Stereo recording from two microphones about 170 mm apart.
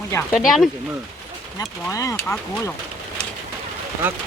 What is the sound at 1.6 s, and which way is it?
Speech, 20° left (ahead or behind).